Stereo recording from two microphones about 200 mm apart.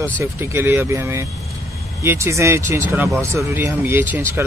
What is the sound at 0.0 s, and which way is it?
Speech, 10° right (ahead or behind).